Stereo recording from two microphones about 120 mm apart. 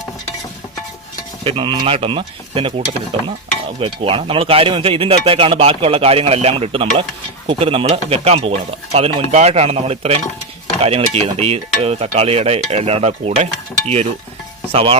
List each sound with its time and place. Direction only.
1.5 s speech: 40° right (ahead or behind)
7.6 s cutlery: 50° right (ahead or behind)
14.7 s speech: 50° right (ahead or behind)